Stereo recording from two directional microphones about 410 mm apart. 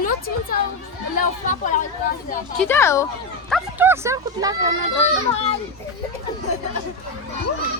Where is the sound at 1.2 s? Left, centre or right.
Centre.